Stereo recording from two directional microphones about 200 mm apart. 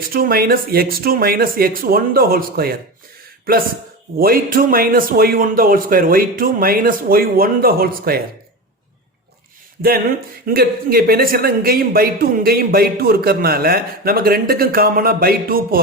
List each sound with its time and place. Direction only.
0.1 s speech: 50° right (ahead or behind)
4.2 s speech: 45° right (ahead or behind)
10.4 s speech: 50° right (ahead or behind)